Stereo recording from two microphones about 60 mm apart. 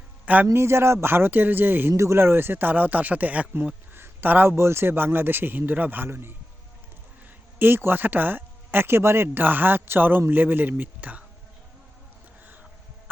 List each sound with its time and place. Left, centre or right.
0.4 s a man's voice: right
1.9 s speech: right
2.2 s speech: right
3.9 s a sound: right
4.5 s speech: right
6.1 s a man's voice: right
7.6 s speech: right